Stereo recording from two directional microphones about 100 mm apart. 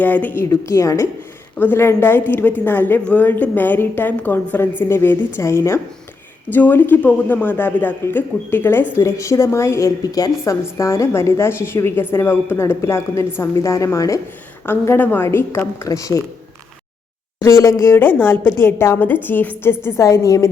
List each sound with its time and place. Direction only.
0.0 s a woman's voice: 15° left (ahead or behind)
0.4 s a woman's voice: 30° left (ahead or behind)
1.5 s a woman's voice: 20° left (ahead or behind)
14.7 s a woman's voice: 20° left (ahead or behind)
15.9 s a woman's voice: 35° left (ahead or behind)
17.4 s a woman's voice: 30° left (ahead or behind)